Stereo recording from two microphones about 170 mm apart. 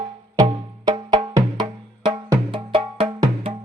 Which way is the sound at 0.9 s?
25° right (ahead or behind).